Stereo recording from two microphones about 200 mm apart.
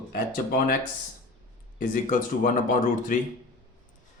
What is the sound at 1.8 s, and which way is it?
Speech, 45° left (ahead or behind).